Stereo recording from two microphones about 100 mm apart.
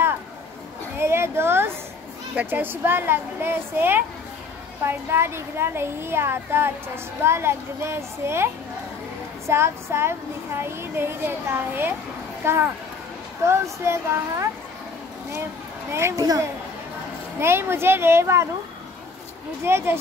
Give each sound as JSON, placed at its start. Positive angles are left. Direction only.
{"t": 0.9, "sound": "a sound", "side_deg": -25}
{"t": 2.3, "sound": "speech", "side_deg": -20}
{"t": 9.5, "sound": "speech", "side_deg": -25}
{"t": 15.9, "sound": "speech", "side_deg": -25}
{"t": 17.4, "sound": "speech", "side_deg": -25}
{"t": 19.6, "sound": "speech", "side_deg": -25}